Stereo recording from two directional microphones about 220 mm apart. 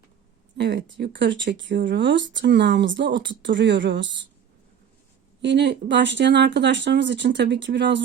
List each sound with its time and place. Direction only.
0.5 s speech: 50° right (ahead or behind)
5.4 s speech: 55° right (ahead or behind)